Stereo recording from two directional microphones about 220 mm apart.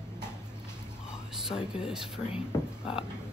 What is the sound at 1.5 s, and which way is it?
Speech, 5° right (ahead or behind).